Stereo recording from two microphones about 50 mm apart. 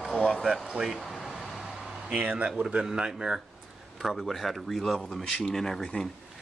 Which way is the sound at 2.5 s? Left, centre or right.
Centre.